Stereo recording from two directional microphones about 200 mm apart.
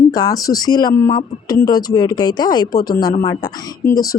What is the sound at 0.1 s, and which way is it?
Speech, 20° left (ahead or behind).